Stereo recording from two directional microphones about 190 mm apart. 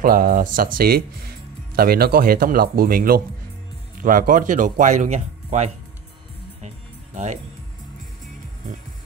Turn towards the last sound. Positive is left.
turn(degrees=-35)  # may be behind; listen again after turning